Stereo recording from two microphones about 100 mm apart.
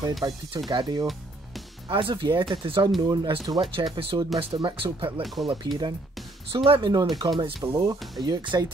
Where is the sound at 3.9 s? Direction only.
70° right (ahead or behind).